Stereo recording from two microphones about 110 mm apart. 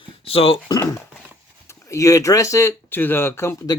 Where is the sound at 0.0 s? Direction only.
60° left (ahead or behind).